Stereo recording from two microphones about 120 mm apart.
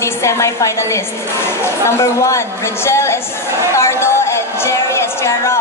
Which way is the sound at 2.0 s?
25° left (ahead or behind).